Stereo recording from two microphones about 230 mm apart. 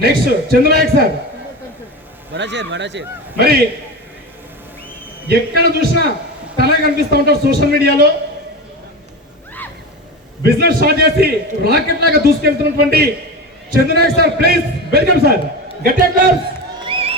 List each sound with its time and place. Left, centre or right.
0.0 s speech: right
2.3 s a man's voice: right
5.3 s a man's voice: right
10.4 s a man's voice: right
16.8 s crowd: right